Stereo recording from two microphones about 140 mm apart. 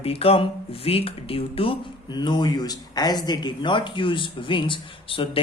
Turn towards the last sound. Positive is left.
turn(degrees=40)  # may be behind; listen again after turning